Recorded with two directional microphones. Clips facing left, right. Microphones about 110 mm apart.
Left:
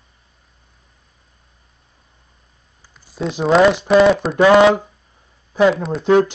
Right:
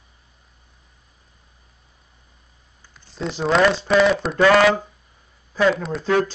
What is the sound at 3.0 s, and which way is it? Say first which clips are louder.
Speech: left 4 dB; 10° left (ahead or behind).